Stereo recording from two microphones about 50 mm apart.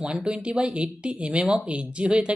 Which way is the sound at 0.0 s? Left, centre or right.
Centre.